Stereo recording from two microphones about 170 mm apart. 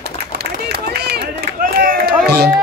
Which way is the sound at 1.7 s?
65° right (ahead or behind).